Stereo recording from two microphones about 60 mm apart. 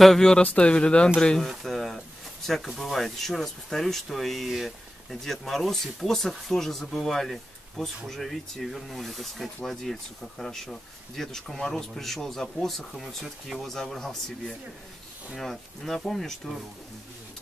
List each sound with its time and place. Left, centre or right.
0.0 s speech: centre
0.4 s speech: left
1.5 s a sound: centre
2.4 s speech: centre